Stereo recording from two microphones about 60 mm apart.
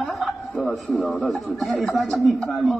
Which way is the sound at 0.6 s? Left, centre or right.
Centre.